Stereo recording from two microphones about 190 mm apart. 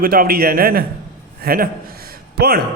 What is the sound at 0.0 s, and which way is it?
A man's voice, 50° right (ahead or behind).